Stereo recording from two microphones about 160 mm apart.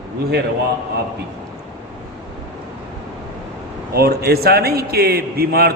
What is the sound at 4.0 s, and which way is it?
Mantra, 75° right (ahead or behind).